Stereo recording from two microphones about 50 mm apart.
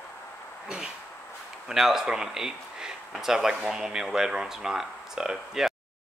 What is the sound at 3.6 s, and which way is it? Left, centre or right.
Speech, right.